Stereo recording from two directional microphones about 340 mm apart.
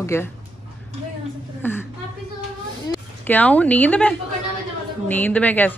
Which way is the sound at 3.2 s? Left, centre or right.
Centre.